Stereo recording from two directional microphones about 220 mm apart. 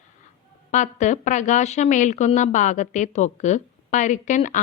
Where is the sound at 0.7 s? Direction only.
35° left (ahead or behind).